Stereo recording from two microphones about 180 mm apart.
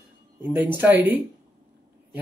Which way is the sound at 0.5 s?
10° right (ahead or behind).